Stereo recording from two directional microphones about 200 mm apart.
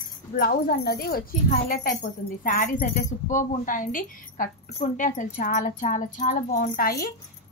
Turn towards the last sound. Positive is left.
turn(degrees=45)  # may be behind; listen again after turning